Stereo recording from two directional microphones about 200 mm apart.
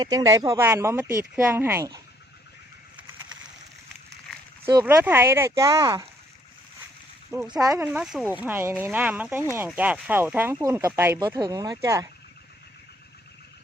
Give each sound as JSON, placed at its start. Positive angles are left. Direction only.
{"t": 0.0, "sound": "speech", "side_deg": -20}
{"t": 4.6, "sound": "speech", "side_deg": -15}
{"t": 7.3, "sound": "speech", "side_deg": -15}
{"t": 7.9, "sound": "speech", "side_deg": -5}